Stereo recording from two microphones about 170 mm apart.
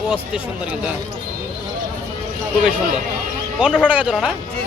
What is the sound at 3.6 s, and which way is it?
Speech, 5° right (ahead or behind).